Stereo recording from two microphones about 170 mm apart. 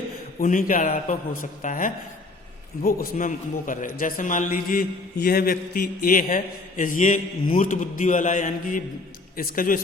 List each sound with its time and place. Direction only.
0.3 s a man's voice: 55° left (ahead or behind)